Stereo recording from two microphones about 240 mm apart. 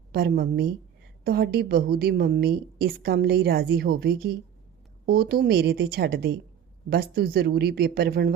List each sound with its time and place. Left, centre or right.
0.1 s a woman's voice: right